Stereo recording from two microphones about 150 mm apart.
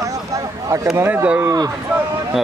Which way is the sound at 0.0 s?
20° right (ahead or behind).